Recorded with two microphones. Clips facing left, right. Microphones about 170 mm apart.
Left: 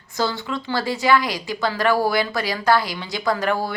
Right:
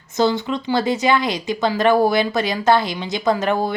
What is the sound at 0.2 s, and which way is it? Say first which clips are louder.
Speech: right 6 dB; 20° right (ahead or behind).